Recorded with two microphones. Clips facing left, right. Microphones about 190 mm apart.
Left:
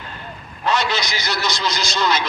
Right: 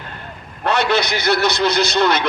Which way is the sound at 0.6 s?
60° right (ahead or behind).